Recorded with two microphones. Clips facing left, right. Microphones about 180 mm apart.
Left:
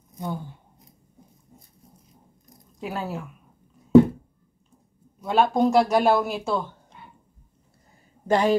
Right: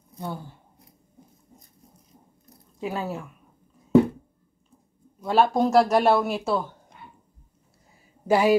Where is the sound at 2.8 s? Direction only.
Centre (ahead or behind).